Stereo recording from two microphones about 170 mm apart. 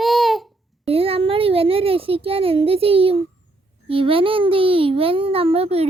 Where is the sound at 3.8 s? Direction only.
35° right (ahead or behind).